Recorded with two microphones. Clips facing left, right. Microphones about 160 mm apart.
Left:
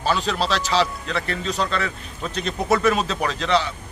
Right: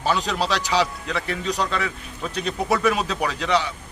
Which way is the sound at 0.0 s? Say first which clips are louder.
Even; 15° right (ahead or behind).